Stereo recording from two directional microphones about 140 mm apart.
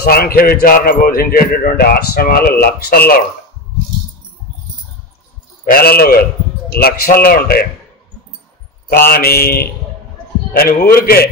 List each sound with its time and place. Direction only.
0.0 s speech: 90° left
5.7 s speech: 90° left
8.9 s speech: 90° left